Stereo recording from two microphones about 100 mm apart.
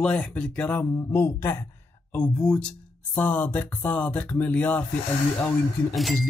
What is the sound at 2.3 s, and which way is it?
Speech, 5° left (ahead or behind).